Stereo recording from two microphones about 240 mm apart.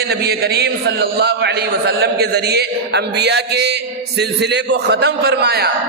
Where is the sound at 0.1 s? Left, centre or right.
Right.